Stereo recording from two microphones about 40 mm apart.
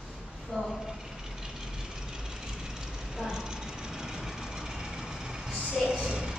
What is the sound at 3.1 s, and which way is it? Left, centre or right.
Vehicle, centre.